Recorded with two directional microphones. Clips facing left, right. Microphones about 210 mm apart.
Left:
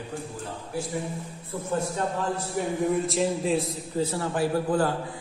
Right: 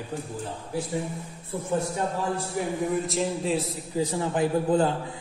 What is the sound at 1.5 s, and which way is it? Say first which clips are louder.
Speech: right 1 dB; 20° right (ahead or behind).